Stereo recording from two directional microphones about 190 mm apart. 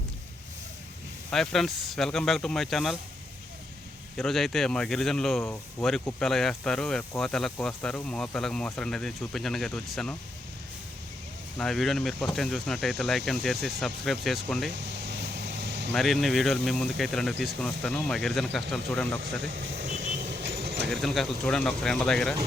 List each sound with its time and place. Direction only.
1.3 s speech: centre (ahead or behind)
4.2 s speech: centre (ahead or behind)
11.5 s speech: centre (ahead or behind)
14.7 s vehicle: 65° right (ahead or behind)
16.0 s speech: centre (ahead or behind)
19.5 s vehicle: 75° right (ahead or behind)
19.9 s vehicle: 40° right (ahead or behind)
20.3 s vehicle: 65° right (ahead or behind)
20.9 s speech: centre (ahead or behind)